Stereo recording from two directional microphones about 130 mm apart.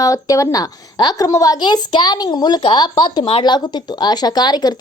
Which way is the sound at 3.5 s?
35° left (ahead or behind).